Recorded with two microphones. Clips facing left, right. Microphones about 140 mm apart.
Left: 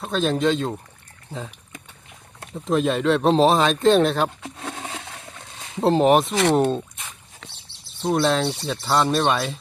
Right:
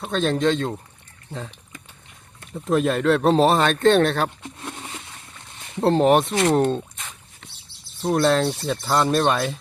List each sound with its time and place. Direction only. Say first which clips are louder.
0.1 s speech: even; 5° left (ahead or behind)
2.6 s speech: right 1 dB; centre (ahead or behind)
4.4 s a sound: left 3 dB; 90° left
5.8 s speech: even; 5° left (ahead or behind)
8.1 s speech: right 2 dB; centre (ahead or behind)